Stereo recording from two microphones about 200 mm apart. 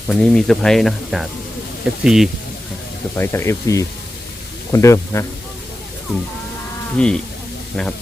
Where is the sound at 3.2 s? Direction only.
10° left (ahead or behind).